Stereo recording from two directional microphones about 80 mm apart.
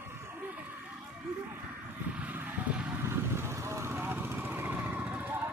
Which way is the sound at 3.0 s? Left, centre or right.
Right.